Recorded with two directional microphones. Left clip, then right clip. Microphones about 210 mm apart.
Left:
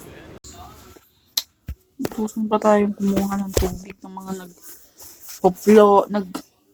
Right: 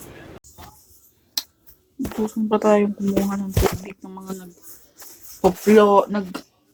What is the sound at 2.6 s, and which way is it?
Speech, 20° left (ahead or behind).